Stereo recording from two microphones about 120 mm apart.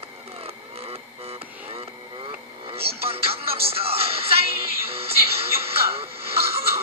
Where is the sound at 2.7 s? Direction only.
55° right (ahead or behind).